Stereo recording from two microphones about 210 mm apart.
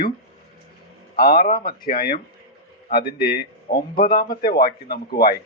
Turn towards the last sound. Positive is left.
turn(degrees=45)  # may be behind; listen again after turning